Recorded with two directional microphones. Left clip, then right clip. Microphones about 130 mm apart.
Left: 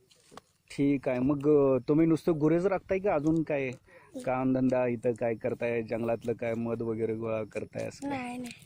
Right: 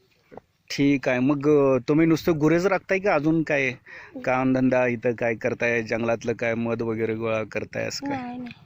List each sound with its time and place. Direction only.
0.7 s speech: 15° right (ahead or behind)
8.1 s speech: 15° left (ahead or behind)